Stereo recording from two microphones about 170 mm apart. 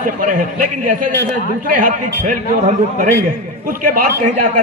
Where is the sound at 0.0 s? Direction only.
50° right (ahead or behind).